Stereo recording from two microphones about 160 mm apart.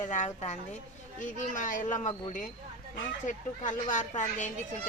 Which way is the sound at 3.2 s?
50° left (ahead or behind).